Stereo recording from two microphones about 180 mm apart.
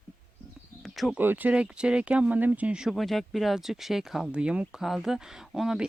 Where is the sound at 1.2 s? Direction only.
10° right (ahead or behind).